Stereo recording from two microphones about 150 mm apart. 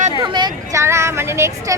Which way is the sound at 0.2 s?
30° right (ahead or behind).